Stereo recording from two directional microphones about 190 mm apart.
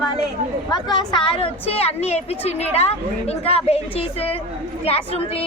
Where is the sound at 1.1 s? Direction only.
30° left (ahead or behind).